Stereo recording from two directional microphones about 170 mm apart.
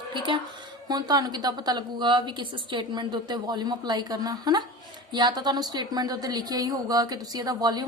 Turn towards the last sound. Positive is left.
turn(degrees=-25)  # may be behind; listen again after turning